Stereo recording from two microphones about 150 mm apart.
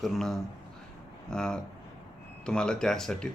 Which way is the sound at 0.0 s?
Centre (ahead or behind).